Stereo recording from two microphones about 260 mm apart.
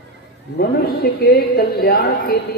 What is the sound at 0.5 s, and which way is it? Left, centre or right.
A woman's voice, left.